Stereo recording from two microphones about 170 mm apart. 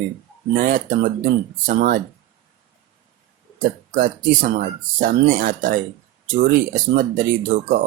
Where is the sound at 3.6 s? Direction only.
55° right (ahead or behind).